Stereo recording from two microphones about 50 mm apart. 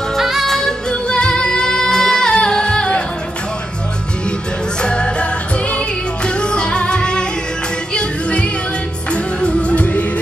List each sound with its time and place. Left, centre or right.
0.2 s music: centre
1.0 s music: centre
4.8 s music: centre